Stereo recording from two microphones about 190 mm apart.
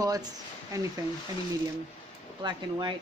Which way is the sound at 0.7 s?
15° right (ahead or behind).